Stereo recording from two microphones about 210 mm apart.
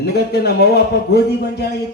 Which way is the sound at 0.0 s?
50° left (ahead or behind).